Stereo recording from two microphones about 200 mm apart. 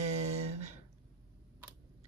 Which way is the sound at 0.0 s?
35° right (ahead or behind).